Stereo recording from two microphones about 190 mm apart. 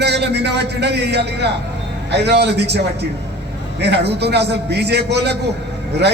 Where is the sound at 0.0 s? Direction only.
60° right (ahead or behind).